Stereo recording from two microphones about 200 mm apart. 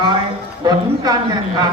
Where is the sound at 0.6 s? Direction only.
20° right (ahead or behind).